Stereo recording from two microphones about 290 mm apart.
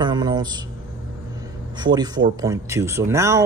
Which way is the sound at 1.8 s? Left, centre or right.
Centre.